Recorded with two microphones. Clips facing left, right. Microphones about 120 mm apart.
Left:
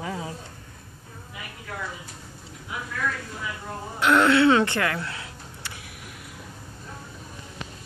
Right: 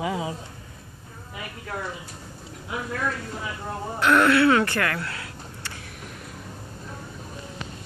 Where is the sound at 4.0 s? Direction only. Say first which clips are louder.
Even; 20° left (ahead or behind).